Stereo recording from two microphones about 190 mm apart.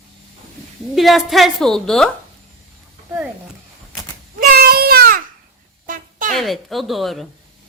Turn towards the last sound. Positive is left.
turn(degrees=0)  # may be behind; listen again after turning